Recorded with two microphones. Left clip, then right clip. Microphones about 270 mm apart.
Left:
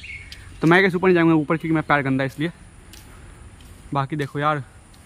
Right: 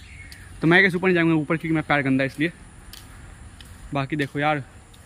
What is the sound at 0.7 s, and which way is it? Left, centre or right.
Speech, centre.